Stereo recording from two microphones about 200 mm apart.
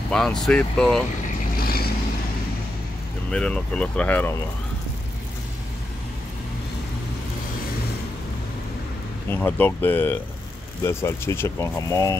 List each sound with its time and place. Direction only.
0.1 s speech: 5° left (ahead or behind)
1.6 s vehicle: 50° left (ahead or behind)
3.3 s speech: 5° left (ahead or behind)
9.3 s speech: 10° left (ahead or behind)